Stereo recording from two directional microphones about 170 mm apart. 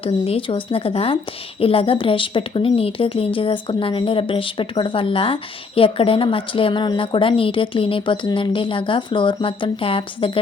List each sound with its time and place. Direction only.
0.0 s speech: 35° left (ahead or behind)